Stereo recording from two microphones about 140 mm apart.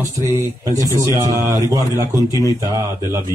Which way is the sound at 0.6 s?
25° right (ahead or behind).